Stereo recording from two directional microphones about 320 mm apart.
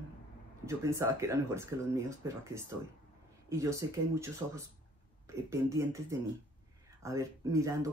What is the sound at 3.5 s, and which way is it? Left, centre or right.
Speech, centre.